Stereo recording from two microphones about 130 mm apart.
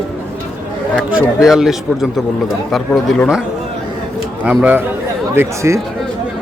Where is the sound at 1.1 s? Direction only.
5° right (ahead or behind).